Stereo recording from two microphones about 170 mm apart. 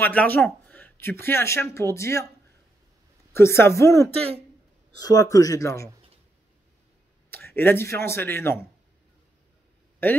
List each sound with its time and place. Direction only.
0.0 s speech: 10° left (ahead or behind)
3.3 s a woman's voice: 15° left (ahead or behind)
7.2 s speech: 10° left (ahead or behind)